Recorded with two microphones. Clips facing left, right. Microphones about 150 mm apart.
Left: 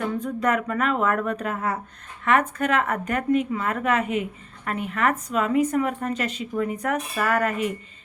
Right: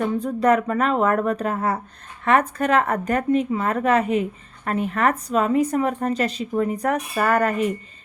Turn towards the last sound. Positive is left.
turn(degrees=-35)  # may be behind; listen again after turning